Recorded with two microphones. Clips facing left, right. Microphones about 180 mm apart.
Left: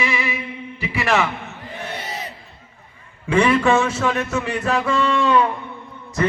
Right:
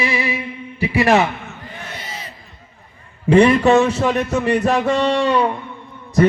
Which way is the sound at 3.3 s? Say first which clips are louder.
Right 5 dB; 35° right (ahead or behind).